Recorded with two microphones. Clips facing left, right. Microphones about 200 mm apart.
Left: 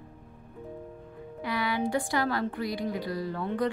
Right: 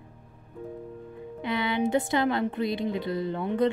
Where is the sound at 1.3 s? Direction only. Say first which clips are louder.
Right 3 dB; 25° right (ahead or behind).